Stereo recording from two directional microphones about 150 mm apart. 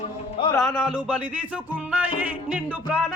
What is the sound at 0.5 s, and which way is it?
Music, centre (ahead or behind).